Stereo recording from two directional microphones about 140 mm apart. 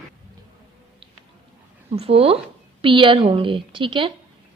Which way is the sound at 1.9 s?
45° right (ahead or behind).